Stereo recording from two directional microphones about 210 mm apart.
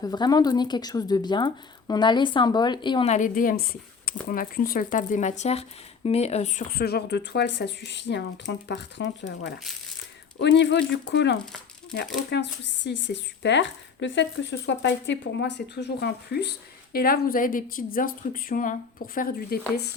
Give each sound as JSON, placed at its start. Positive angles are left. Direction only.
{"t": 0.0, "sound": "speech", "side_deg": 20}